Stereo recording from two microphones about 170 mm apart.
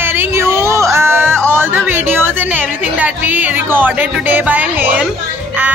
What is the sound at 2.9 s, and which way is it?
Music, 10° right (ahead or behind).